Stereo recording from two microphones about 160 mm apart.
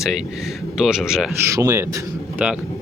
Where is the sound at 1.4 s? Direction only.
20° right (ahead or behind).